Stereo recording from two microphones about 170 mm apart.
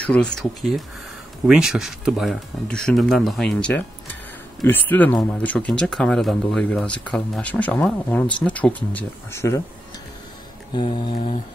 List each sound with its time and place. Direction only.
0.0 s speech: 5° left (ahead or behind)
10.7 s mantra: 25° left (ahead or behind)